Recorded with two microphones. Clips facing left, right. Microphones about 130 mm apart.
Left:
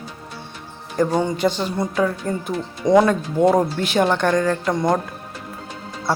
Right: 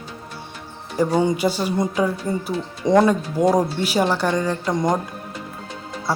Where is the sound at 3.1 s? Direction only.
10° right (ahead or behind).